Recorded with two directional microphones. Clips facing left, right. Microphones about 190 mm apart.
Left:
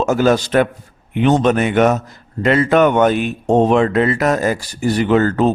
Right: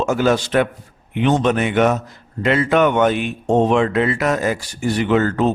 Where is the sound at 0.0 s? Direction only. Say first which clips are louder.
Left 3 dB; 40° left (ahead or behind).